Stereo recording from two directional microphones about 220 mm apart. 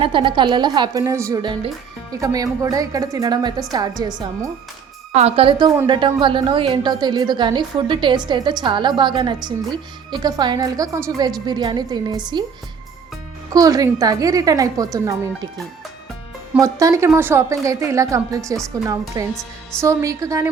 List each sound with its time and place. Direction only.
0.0 s a woman's voice: 20° right (ahead or behind)
5.1 s a woman's voice: 25° right (ahead or behind)
13.5 s a woman's voice: 15° right (ahead or behind)
16.6 s a woman's voice: 15° right (ahead or behind)